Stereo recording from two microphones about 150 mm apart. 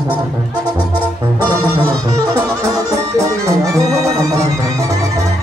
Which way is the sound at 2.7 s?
20° right (ahead or behind).